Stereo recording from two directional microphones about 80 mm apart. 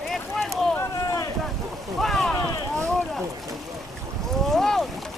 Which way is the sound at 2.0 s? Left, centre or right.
Centre.